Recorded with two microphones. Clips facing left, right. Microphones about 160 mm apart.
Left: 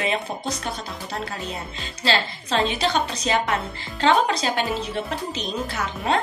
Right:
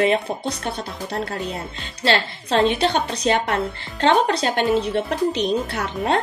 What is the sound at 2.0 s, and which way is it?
Speech, 60° right (ahead or behind).